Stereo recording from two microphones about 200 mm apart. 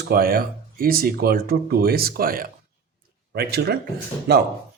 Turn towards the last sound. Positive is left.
turn(degrees=-55)  # may be behind; listen again after turning